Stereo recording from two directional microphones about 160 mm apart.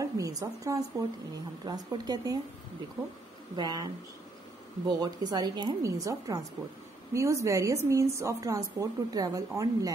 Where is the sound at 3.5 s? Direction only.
25° right (ahead or behind).